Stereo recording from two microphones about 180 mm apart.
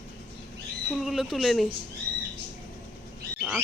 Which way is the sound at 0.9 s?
Centre (ahead or behind).